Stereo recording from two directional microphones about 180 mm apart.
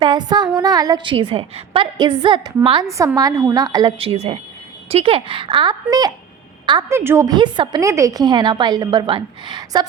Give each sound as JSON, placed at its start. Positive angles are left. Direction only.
{"t": 0.0, "sound": "a woman's voice", "side_deg": -25}